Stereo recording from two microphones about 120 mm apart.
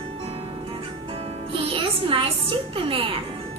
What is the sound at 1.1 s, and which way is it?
Music, 50° right (ahead or behind).